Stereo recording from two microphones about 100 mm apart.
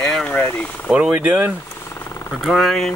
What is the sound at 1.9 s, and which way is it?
Vehicle, 30° left (ahead or behind).